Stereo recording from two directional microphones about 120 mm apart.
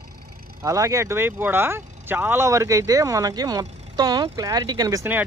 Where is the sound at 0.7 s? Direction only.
25° right (ahead or behind).